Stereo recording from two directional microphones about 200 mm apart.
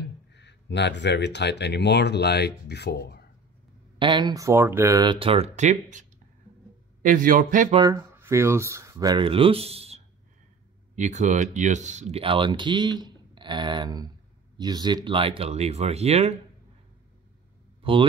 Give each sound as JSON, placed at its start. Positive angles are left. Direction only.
{"t": 0.0, "sound": "speech", "side_deg": 60}
{"t": 4.0, "sound": "a man's voice", "side_deg": -25}
{"t": 7.7, "sound": "speech", "side_deg": -20}
{"t": 17.8, "sound": "speech", "side_deg": -25}